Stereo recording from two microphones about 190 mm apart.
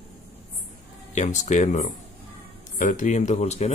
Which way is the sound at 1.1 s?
40° left (ahead or behind).